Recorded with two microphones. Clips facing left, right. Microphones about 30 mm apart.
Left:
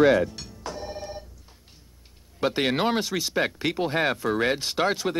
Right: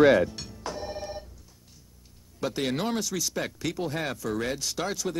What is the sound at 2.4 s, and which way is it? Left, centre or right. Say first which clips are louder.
Speech: left 5 dB; left.